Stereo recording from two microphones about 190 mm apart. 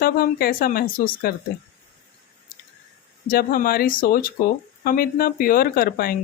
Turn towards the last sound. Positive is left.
turn(degrees=50)  # may be behind; listen again after turning